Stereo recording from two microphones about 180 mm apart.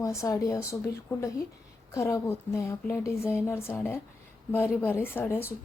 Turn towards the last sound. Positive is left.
turn(degrees=10)  # may be behind; listen again after turning